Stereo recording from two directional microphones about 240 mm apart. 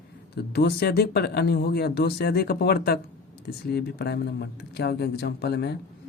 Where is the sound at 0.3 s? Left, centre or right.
Left.